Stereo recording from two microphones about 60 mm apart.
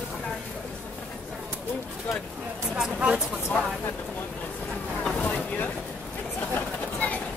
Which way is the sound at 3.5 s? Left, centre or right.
Left.